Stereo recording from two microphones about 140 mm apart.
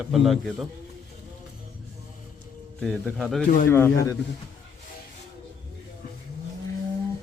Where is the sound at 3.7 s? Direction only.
15° left (ahead or behind).